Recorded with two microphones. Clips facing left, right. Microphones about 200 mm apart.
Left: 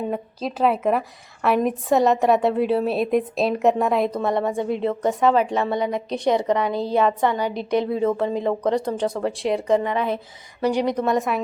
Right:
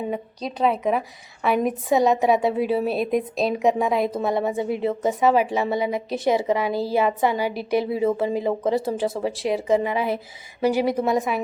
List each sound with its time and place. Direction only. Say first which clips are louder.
0.1 s a woman's voice: left 2 dB; centre (ahead or behind)